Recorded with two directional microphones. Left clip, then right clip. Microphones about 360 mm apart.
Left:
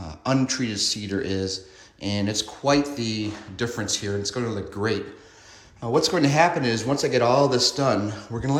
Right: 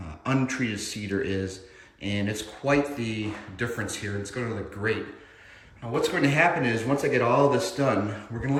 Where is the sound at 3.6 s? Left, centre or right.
Left.